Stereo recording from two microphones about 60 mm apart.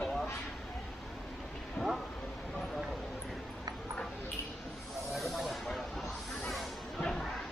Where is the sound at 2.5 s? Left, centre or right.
Centre.